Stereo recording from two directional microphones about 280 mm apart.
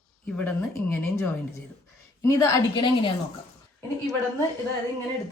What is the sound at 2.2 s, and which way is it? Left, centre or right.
Speech, centre.